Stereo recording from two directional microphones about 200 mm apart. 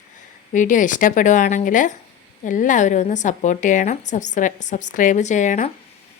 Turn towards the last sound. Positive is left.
turn(degrees=40)  # may be behind; listen again after turning